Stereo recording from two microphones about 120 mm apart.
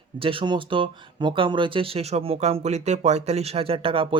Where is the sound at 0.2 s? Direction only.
50° right (ahead or behind).